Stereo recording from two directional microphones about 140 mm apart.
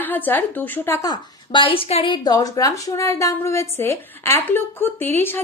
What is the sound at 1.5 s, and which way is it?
A woman's voice, 35° left (ahead or behind).